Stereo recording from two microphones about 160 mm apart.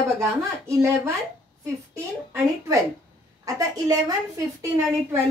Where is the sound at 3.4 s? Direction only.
20° right (ahead or behind).